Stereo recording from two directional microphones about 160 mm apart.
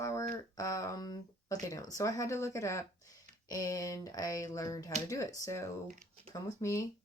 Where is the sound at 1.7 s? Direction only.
20° left (ahead or behind).